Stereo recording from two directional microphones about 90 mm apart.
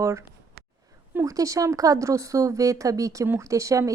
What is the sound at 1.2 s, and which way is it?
Speech, 35° right (ahead or behind).